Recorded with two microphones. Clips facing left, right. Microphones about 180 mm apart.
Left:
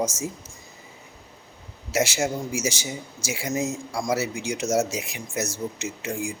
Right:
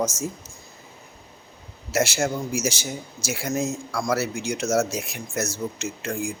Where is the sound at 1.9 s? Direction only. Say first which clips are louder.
Right 1 dB; 15° left (ahead or behind).